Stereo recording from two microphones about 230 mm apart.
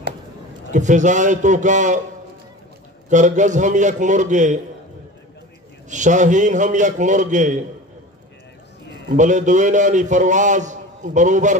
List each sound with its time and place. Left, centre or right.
0.7 s a man's voice: right
3.1 s a man's voice: right
5.9 s a man's voice: right
9.1 s a man's voice: right